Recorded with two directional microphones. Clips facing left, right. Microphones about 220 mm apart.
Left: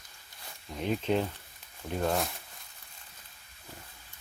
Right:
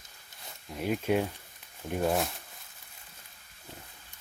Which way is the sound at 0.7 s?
5° right (ahead or behind).